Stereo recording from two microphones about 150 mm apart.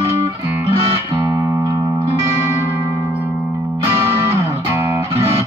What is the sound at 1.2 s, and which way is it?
Music, 20° right (ahead or behind).